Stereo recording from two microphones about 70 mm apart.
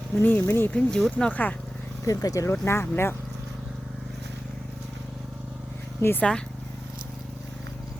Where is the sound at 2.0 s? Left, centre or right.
Left.